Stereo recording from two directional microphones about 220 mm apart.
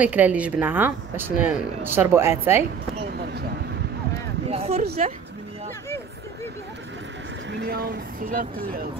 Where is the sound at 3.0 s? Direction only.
45° right (ahead or behind).